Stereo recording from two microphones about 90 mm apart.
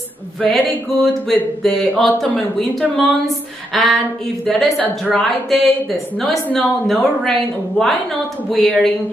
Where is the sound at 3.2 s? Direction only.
Centre (ahead or behind).